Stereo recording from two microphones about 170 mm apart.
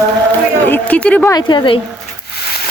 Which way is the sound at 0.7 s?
10° left (ahead or behind).